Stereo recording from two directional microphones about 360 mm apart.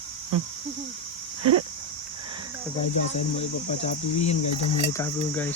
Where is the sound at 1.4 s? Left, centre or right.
Right.